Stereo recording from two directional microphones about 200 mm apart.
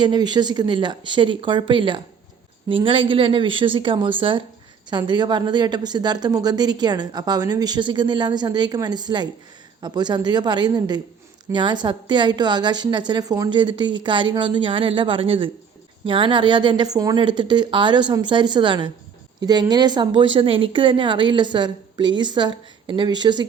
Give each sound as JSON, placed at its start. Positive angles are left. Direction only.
{"t": 0.0, "sound": "a woman's voice", "side_deg": -20}